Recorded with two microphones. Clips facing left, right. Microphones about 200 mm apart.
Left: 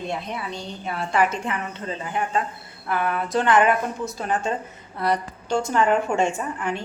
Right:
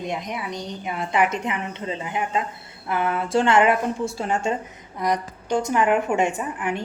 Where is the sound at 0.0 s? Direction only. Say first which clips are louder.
Right 1 dB; 15° right (ahead or behind).